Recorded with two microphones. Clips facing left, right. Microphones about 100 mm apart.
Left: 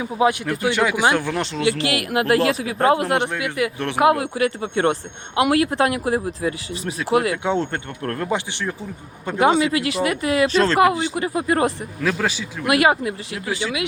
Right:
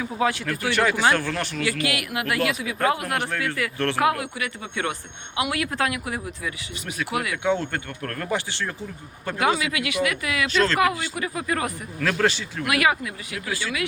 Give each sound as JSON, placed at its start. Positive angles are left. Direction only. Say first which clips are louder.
{"t": 0.0, "sound": "speech", "louder": "left 5 dB", "side_deg": 20}
{"t": 4.4, "sound": "speech", "louder": "left 9 dB", "side_deg": 35}
{"t": 12.0, "sound": "a man's voice", "louder": "even", "side_deg": 10}
{"t": 12.6, "sound": "speech", "louder": "left 5 dB", "side_deg": 30}